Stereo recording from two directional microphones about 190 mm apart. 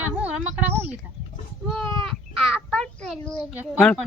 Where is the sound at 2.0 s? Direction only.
Centre (ahead or behind).